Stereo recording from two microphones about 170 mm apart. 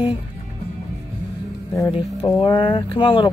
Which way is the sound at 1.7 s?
20° left (ahead or behind).